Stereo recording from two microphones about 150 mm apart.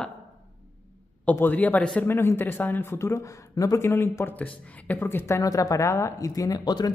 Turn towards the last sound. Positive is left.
turn(degrees=25)  # may be behind; listen again after turning